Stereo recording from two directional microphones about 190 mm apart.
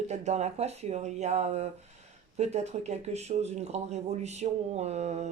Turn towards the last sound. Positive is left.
turn(degrees=-35)  # may be behind; listen again after turning